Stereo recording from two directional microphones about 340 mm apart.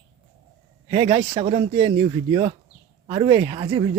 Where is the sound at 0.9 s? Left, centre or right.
Centre.